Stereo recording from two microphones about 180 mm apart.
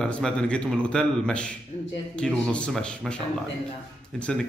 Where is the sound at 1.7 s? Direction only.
40° left (ahead or behind).